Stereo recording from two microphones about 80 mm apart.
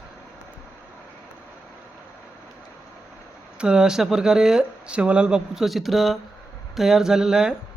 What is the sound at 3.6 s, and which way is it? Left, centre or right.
Speech, centre.